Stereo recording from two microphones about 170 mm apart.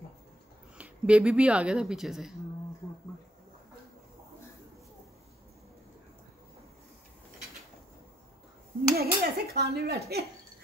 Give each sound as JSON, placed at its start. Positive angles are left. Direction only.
{"t": 0.7, "sound": "speech", "side_deg": -10}
{"t": 8.9, "sound": "dishes", "side_deg": -65}